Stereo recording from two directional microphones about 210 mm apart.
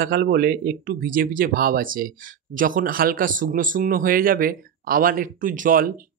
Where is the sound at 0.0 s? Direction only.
45° right (ahead or behind).